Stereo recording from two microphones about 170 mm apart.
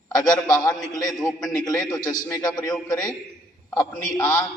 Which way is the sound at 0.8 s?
20° left (ahead or behind).